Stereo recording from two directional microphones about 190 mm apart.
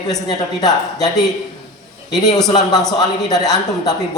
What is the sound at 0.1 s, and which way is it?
Speech, 20° left (ahead or behind).